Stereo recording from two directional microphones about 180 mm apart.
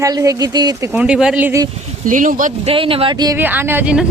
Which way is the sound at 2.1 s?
45° right (ahead or behind).